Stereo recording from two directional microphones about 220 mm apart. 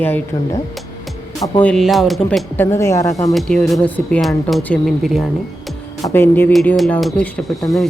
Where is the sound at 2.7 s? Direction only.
15° left (ahead or behind).